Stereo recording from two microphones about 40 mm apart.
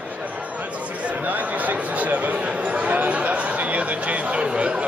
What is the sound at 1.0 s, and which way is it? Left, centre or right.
Chatter, right.